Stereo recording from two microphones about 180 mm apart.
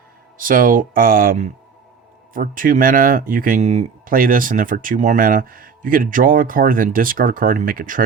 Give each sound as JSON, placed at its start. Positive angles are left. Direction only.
{"t": 0.3, "sound": "speech", "side_deg": -50}